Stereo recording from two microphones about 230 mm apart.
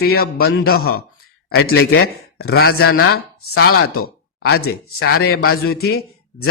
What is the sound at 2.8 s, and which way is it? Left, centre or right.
Speech, left.